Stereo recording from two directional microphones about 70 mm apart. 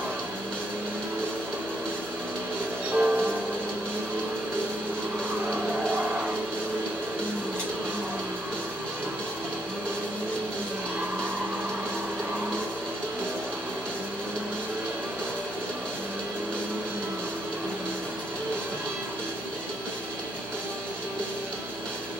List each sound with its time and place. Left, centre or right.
2.9 s music: right